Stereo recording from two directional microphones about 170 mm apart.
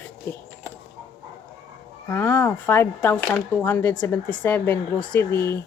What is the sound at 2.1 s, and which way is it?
Speech, 10° left (ahead or behind).